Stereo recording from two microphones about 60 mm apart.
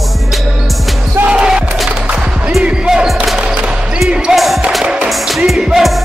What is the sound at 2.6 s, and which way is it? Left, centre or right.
Basketball bounce, centre.